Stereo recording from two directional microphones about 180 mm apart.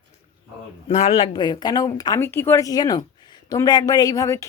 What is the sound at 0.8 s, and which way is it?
Speech, 35° left (ahead or behind).